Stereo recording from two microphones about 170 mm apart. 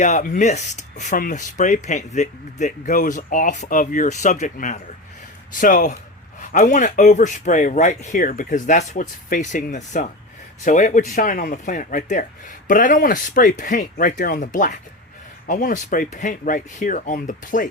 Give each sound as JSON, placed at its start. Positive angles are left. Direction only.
{"t": 0.0, "sound": "speech", "side_deg": 45}